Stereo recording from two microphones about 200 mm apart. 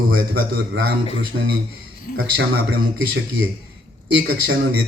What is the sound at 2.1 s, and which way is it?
Speech, 45° left (ahead or behind).